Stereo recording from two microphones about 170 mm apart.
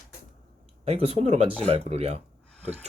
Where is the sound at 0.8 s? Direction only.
35° right (ahead or behind).